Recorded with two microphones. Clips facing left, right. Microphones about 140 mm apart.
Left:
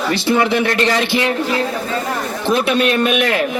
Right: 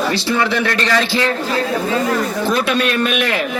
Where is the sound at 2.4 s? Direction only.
20° left (ahead or behind).